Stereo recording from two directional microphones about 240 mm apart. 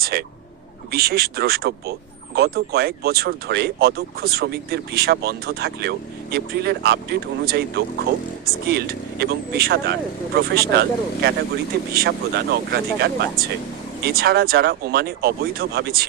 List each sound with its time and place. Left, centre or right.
0.0 s speech: right